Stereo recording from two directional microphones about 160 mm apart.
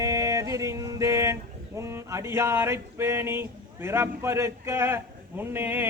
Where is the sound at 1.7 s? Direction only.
20° right (ahead or behind).